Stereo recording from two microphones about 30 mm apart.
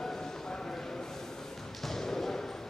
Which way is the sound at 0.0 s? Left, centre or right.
Centre.